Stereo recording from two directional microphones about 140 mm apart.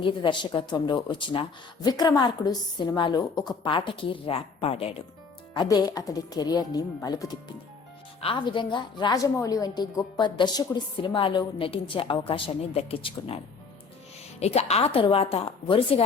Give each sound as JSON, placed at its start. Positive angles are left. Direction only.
{"t": 0.0, "sound": "a woman's voice", "side_deg": 35}
{"t": 5.5, "sound": "a woman's voice", "side_deg": 25}